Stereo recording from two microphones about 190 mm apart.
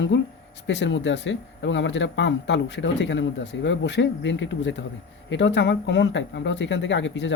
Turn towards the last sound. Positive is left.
turn(degrees=70)  # may be behind; listen again after turning